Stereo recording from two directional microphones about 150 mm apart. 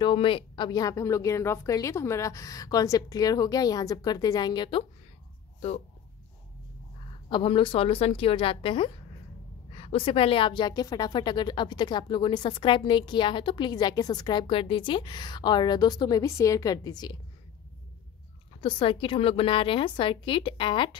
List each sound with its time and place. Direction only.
0.0 s a woman's voice: 35° left (ahead or behind)
7.2 s a woman's voice: 35° left (ahead or behind)
18.6 s a woman's voice: 35° left (ahead or behind)